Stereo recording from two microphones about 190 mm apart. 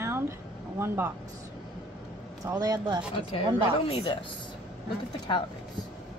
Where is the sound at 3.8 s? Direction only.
30° left (ahead or behind).